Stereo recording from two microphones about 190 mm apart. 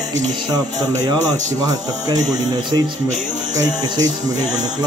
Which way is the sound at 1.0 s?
20° right (ahead or behind).